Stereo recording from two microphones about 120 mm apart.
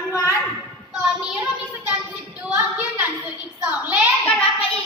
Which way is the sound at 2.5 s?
15° right (ahead or behind).